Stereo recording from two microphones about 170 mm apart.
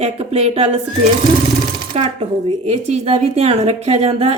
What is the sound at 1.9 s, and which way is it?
Speech, 40° right (ahead or behind).